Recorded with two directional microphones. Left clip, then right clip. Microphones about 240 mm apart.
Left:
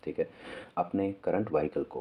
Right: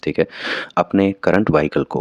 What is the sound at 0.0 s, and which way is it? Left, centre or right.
Speech, right.